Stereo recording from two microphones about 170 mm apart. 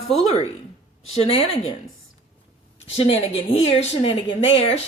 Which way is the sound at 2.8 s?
35° left (ahead or behind).